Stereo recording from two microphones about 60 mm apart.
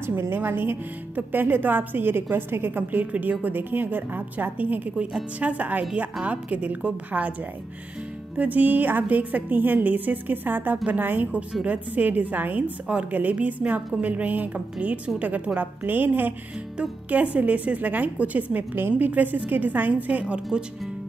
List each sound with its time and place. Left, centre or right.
0.0 s a woman's voice: right
8.4 s a woman's voice: right